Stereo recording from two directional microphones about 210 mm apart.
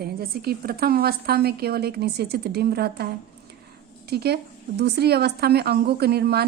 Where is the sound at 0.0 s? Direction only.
45° right (ahead or behind).